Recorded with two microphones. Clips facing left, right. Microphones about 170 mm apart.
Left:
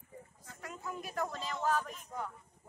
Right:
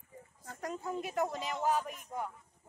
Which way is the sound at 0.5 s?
40° right (ahead or behind).